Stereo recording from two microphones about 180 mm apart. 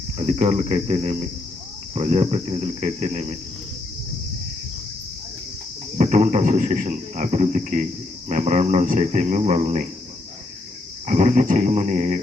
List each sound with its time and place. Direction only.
0.2 s speech: 35° right (ahead or behind)
6.0 s speech: 45° right (ahead or behind)
11.0 s speech: 40° right (ahead or behind)